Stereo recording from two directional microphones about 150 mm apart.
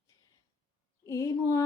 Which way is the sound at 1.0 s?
20° left (ahead or behind).